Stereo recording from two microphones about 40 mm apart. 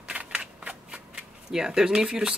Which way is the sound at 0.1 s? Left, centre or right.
Right.